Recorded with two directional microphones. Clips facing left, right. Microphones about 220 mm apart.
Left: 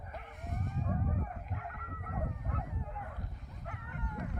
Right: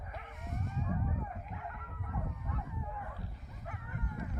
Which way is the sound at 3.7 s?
60° left (ahead or behind).